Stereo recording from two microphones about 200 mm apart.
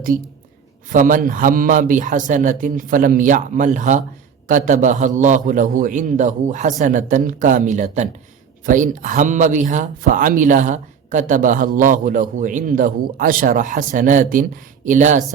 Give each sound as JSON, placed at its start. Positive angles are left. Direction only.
{"t": 0.9, "sound": "speech", "side_deg": -40}